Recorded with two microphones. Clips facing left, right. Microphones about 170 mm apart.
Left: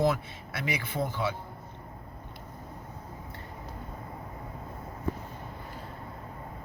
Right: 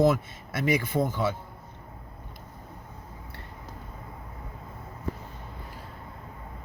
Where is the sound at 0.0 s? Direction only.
45° right (ahead or behind).